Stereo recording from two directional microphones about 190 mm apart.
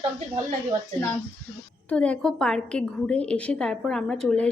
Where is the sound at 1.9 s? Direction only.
5° left (ahead or behind).